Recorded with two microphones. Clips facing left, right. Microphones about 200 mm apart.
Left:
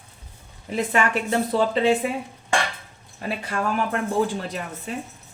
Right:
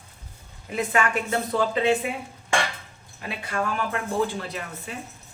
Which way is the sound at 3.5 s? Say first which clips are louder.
Left 2 dB; 40° left (ahead or behind).